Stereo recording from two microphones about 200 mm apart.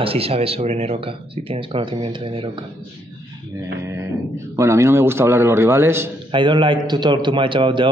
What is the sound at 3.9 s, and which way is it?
Speech, 15° right (ahead or behind).